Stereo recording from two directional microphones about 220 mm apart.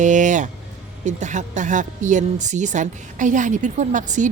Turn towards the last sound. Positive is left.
turn(degrees=-35)  # may be behind; listen again after turning